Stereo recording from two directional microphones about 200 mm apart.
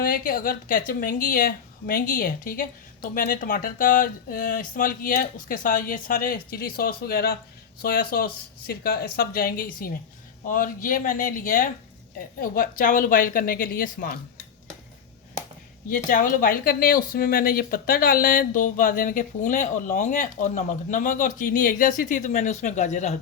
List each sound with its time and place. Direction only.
0.0 s a woman's voice: 45° left (ahead or behind)
15.9 s speech: 45° left (ahead or behind)